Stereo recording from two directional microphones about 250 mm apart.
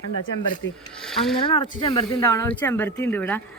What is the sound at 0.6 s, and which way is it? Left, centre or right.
Speech, left.